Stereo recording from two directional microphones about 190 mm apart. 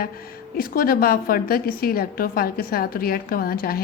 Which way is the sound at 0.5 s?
50° left (ahead or behind).